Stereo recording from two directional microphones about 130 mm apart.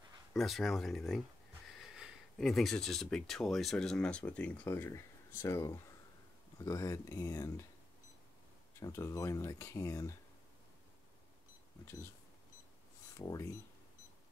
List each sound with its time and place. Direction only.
0.3 s speech: centre (ahead or behind)
4.6 s speech: 20° left (ahead or behind)
8.7 s speech: 20° left (ahead or behind)
13.2 s speech: 25° left (ahead or behind)